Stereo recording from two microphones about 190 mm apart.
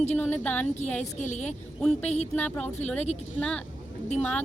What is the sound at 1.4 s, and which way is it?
A woman's voice, 5° left (ahead or behind).